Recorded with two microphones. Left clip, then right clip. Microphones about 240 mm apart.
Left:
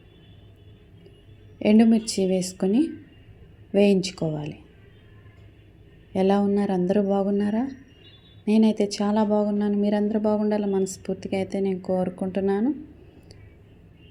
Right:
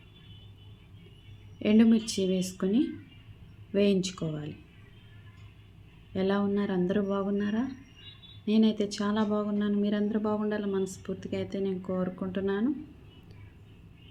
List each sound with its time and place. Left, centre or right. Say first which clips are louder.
1.5 s a woman's voice: left 5 dB; centre
6.1 s speech: left 7 dB; centre